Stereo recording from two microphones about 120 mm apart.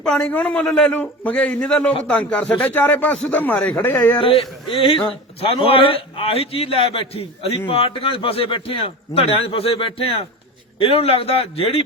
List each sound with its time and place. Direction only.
0.0 s speech: 10° left (ahead or behind)
4.2 s a man's voice: 50° left (ahead or behind)